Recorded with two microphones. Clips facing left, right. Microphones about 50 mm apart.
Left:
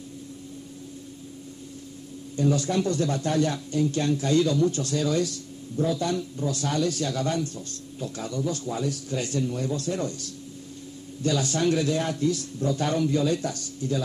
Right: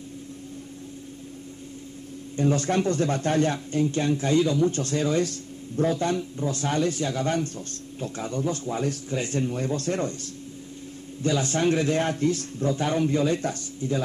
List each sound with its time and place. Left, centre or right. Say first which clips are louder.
2.3 s speech: right 1 dB; right
4.6 s speech: right 1 dB; right
7.2 s speech: right 1 dB; right